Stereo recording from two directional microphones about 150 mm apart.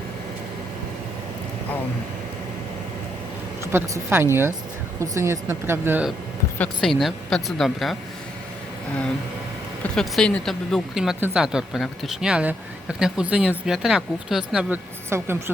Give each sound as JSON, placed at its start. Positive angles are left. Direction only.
{"t": 3.6, "sound": "speech", "side_deg": -15}
{"t": 6.6, "sound": "speech", "side_deg": 0}
{"t": 9.8, "sound": "speech", "side_deg": 5}
{"t": 15.1, "sound": "speech", "side_deg": -15}